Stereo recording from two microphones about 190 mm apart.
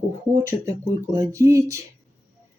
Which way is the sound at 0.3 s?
15° right (ahead or behind).